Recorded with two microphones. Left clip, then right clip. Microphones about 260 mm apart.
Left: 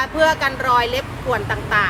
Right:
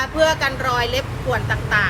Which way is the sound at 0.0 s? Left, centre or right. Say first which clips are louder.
Left 1 dB; left.